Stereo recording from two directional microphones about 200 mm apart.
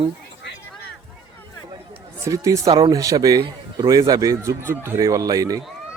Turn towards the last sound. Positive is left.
turn(degrees=-15)  # may be behind; listen again after turning